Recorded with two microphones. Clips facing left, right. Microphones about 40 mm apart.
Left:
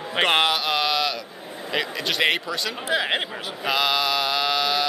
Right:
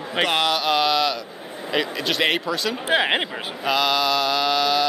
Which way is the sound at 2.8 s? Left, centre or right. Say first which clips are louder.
Right 4 dB; right.